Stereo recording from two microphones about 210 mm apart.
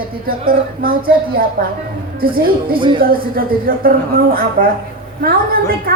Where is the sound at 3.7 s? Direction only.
45° right (ahead or behind).